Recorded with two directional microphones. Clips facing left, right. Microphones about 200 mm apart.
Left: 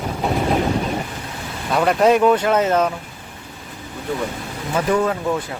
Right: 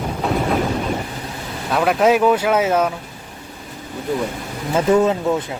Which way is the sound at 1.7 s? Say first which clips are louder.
Even; centre (ahead or behind).